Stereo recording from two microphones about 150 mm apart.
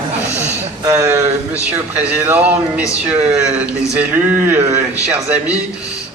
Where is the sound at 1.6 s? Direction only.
10° right (ahead or behind).